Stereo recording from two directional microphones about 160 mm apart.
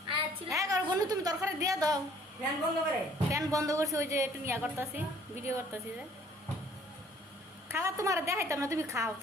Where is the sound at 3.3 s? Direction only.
20° right (ahead or behind).